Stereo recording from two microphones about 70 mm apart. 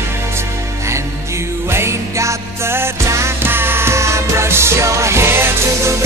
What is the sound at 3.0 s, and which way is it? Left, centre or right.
Music, right.